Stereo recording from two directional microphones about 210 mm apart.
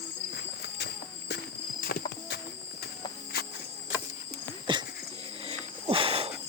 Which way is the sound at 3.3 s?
50° left (ahead or behind).